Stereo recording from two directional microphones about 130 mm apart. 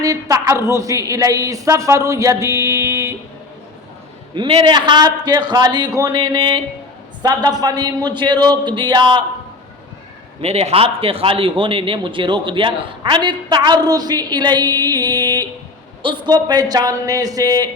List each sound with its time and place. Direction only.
0.0 s speech: 25° right (ahead or behind)
4.4 s a man's voice: 45° right (ahead or behind)
10.4 s a man's voice: 50° right (ahead or behind); by 17.7 s 30° right (ahead or behind)